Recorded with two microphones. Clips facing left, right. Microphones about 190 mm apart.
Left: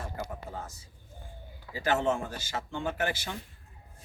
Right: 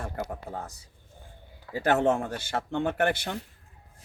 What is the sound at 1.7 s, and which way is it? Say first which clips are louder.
Speech: right 4 dB; 60° right (ahead or behind).